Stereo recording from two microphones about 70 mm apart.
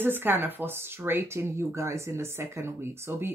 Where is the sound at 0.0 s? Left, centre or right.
Right.